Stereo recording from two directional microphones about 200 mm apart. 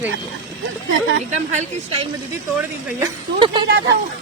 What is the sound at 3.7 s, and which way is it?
Speech, 60° right (ahead or behind).